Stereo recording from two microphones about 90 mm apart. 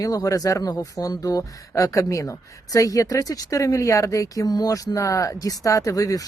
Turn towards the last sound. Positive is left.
turn(degrees=40)  # may be behind; listen again after turning